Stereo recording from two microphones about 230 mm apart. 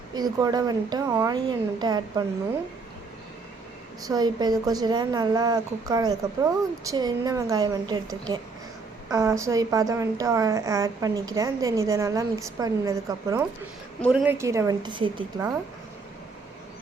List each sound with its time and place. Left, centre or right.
0.1 s a woman's voice: centre
4.0 s a woman's voice: centre
9.0 s a woman's voice: centre
14.0 s a woman's voice: centre